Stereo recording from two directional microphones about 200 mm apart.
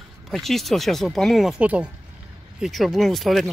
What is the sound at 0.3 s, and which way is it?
Speech, centre (ahead or behind).